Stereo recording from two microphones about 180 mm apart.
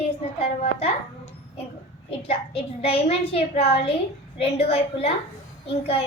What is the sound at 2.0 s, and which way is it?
A woman's voice, 35° left (ahead or behind).